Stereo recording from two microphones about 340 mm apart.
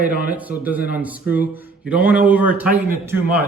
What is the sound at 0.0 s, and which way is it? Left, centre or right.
Speech, left.